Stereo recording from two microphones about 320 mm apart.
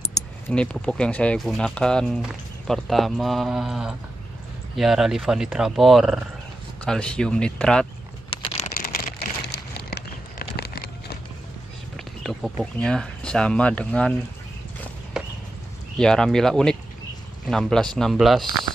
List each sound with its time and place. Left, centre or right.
0.5 s speech: centre
8.3 s a sound: centre
9.5 s a sound: left
12.0 s speech: centre
15.2 s clip-clop: centre
16.0 s speech: centre